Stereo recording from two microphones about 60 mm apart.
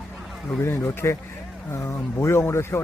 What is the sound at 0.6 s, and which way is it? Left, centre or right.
Speech, left.